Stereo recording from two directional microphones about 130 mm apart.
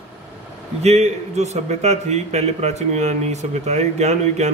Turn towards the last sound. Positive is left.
turn(degrees=-60)  # may be behind; listen again after turning